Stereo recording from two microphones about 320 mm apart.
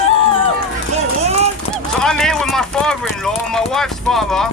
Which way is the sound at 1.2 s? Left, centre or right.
Centre.